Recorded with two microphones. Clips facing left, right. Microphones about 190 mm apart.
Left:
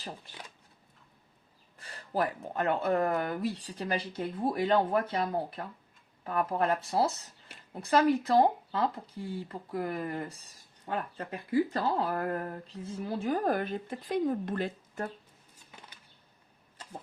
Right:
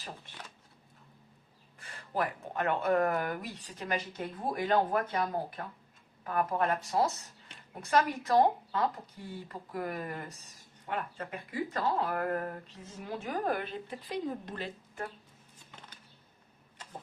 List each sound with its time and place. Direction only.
1.8 s speech: 35° left (ahead or behind); by 15.0 s 50° left (ahead or behind)